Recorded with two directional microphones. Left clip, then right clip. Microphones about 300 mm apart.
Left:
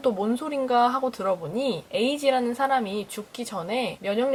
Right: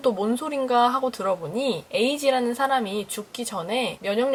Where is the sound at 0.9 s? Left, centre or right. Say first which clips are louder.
Right 1 dB; centre.